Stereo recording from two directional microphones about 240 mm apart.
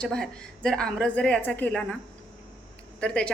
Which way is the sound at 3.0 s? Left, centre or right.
Centre.